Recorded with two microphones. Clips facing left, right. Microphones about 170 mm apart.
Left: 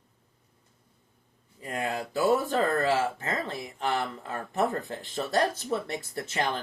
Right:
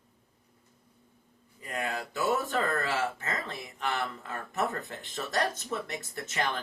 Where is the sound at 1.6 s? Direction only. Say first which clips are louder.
Left 3 dB; 30° left (ahead or behind).